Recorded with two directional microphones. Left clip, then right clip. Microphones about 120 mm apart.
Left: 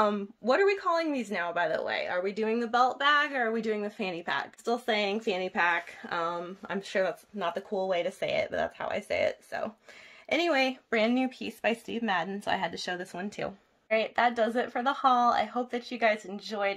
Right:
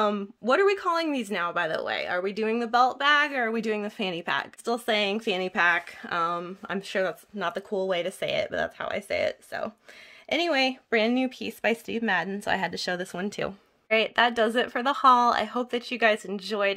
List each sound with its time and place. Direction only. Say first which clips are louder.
0.0 s speech: right 1 dB; 40° right (ahead or behind)
4.6 s speech: right 3 dB; 40° right (ahead or behind); by 16.7 s 70° right (ahead or behind)